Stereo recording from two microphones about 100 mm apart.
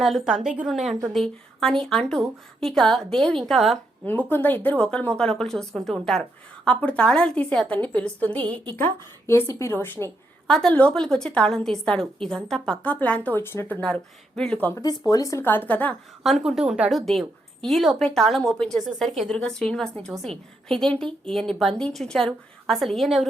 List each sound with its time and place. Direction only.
0.0 s a woman's voice: centre (ahead or behind)
4.0 s a woman's voice: 20° left (ahead or behind)
8.7 s a woman's voice: 25° left (ahead or behind)
10.4 s a woman's voice: 5° left (ahead or behind)
12.9 s a woman's voice: 15° left (ahead or behind)
13.8 s a woman's voice: 10° left (ahead or behind)
15.1 s speech: 35° left (ahead or behind)
15.4 s a woman's voice: 15° left (ahead or behind)
16.2 s a woman's voice: centre (ahead or behind)